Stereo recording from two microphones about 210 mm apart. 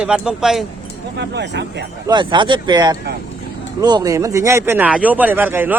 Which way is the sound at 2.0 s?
20° right (ahead or behind).